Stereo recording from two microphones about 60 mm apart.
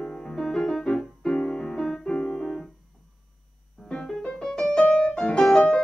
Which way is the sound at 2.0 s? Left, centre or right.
Centre.